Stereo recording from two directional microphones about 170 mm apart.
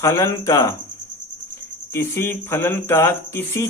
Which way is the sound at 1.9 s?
15° left (ahead or behind).